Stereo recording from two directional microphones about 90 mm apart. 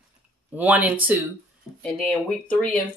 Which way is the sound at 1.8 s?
10° left (ahead or behind).